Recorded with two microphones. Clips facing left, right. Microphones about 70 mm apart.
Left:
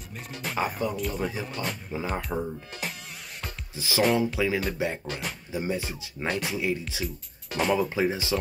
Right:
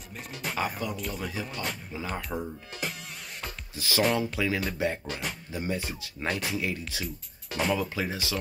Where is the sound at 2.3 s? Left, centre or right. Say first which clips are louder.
Left 3 dB; centre.